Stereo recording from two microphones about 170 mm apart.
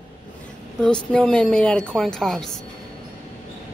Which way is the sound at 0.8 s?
5° left (ahead or behind).